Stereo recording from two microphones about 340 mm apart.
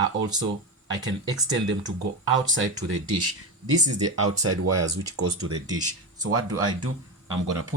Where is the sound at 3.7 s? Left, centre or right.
Right.